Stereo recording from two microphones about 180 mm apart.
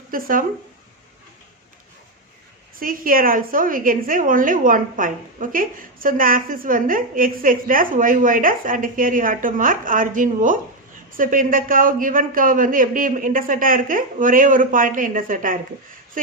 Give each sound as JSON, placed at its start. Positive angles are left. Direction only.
{"t": 0.1, "sound": "a woman's voice", "side_deg": -50}
{"t": 2.7, "sound": "a woman's voice", "side_deg": -50}